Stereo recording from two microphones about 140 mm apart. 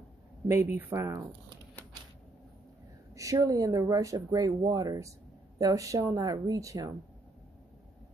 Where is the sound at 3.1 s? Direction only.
25° right (ahead or behind).